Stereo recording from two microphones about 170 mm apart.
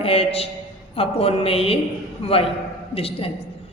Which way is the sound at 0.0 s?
35° left (ahead or behind).